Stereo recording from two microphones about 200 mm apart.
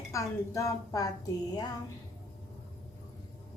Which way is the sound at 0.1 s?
15° left (ahead or behind).